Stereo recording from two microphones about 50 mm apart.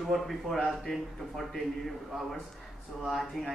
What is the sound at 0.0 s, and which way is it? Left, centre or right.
A man's voice, centre.